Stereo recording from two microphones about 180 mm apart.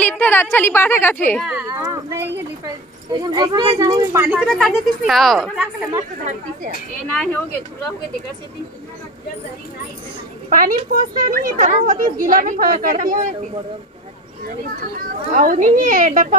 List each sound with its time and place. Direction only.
0.0 s a woman's voice: 10° left (ahead or behind)
1.4 s speech: 5° right (ahead or behind)
1.7 s speech: 15° right (ahead or behind)
4.3 s speech: centre (ahead or behind)
7.1 s speech: 5° left (ahead or behind)
10.5 s a woman's voice: 50° right (ahead or behind)
14.8 s a woman's voice: 50° right (ahead or behind)